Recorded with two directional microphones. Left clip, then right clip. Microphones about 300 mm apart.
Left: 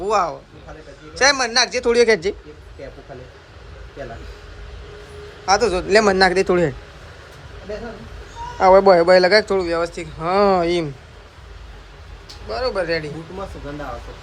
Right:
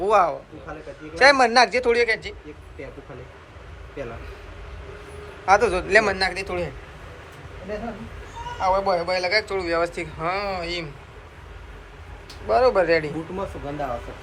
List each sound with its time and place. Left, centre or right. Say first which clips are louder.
0.0 s a man's voice: right 1 dB; centre
5.5 s a man's voice: left 1 dB; centre; by 6.7 s left
8.6 s speech: left 10 dB; left
12.5 s a man's voice: right 4 dB; centre